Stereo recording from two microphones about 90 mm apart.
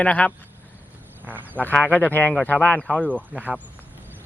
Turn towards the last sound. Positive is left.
turn(degrees=-15)  # may be behind; listen again after turning